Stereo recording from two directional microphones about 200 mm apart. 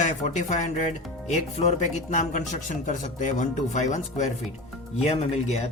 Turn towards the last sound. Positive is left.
turn(degrees=35)  # may be behind; listen again after turning